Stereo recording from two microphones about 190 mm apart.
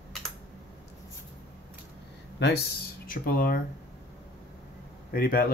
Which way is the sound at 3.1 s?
50° left (ahead or behind).